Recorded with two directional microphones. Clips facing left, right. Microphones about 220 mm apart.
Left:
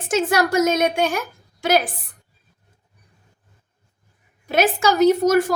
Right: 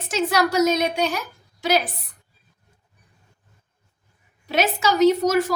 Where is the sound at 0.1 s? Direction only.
50° left (ahead or behind).